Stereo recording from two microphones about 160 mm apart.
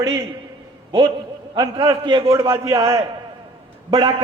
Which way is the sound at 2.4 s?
20° right (ahead or behind).